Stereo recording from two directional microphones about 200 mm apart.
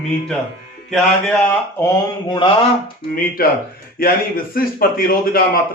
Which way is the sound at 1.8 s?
20° left (ahead or behind).